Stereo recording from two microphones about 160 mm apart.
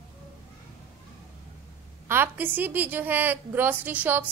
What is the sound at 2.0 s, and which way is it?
A woman's voice, 15° right (ahead or behind).